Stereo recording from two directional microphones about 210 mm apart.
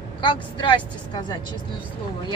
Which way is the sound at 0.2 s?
25° left (ahead or behind).